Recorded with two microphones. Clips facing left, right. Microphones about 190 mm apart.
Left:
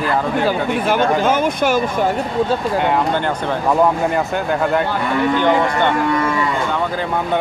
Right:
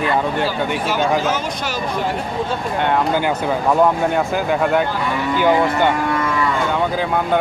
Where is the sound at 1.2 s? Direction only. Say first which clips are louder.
Left 5 dB; 55° left (ahead or behind).